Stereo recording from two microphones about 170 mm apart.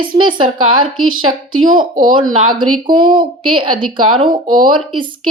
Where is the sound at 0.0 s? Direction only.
30° right (ahead or behind).